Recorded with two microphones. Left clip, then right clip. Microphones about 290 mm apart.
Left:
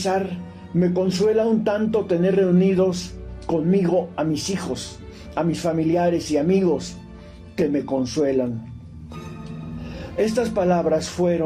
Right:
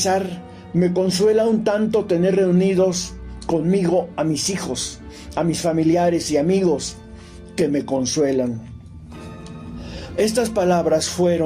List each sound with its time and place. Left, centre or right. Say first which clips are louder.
0.8 s speech: right 2 dB; right
10.2 s speech: right 2 dB; right